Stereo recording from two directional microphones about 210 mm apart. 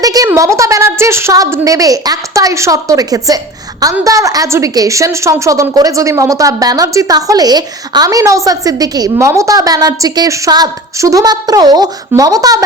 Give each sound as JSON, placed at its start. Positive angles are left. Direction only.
{"t": 0.0, "sound": "a woman's voice", "side_deg": -15}